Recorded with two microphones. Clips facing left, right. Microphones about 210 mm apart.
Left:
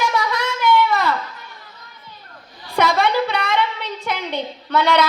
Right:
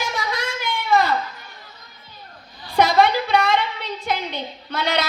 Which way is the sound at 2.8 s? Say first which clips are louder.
Right 1 dB; 55° left (ahead or behind).